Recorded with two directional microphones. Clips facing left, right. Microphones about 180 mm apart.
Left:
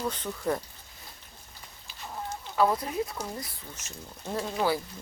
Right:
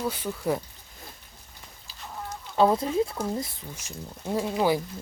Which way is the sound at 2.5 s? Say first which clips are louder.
Right 4 dB; 25° right (ahead or behind).